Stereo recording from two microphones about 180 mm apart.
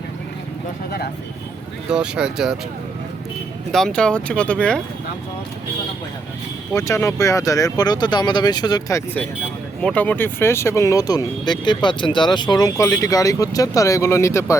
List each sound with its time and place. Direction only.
0.9 s speech: 60° left (ahead or behind)
1.9 s speech: 5° right (ahead or behind)
3.7 s speech: 5° left (ahead or behind)
6.7 s speech: 15° left (ahead or behind)